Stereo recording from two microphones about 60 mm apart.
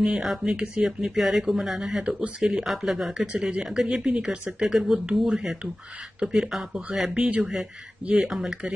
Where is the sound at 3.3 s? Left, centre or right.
Centre.